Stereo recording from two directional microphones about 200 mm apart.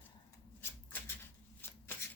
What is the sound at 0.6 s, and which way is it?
Shuffling cards, 10° left (ahead or behind).